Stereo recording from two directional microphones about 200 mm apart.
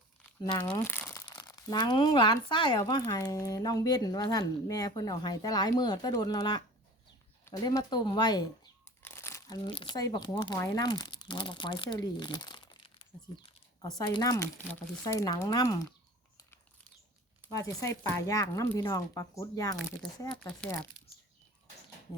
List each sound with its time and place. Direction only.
0.9 s speech: 10° left (ahead or behind)
17.5 s speech: 15° left (ahead or behind)